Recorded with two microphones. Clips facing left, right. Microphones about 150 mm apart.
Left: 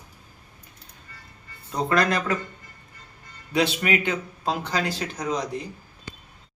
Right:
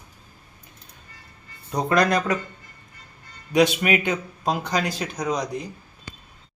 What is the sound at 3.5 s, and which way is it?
Speech, 15° right (ahead or behind).